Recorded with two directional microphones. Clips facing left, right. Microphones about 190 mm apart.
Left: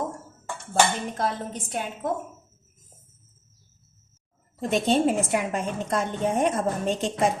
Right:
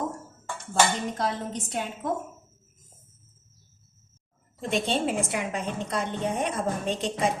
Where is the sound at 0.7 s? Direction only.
50° left (ahead or behind).